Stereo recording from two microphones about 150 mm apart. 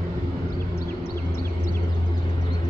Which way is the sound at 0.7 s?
90° left.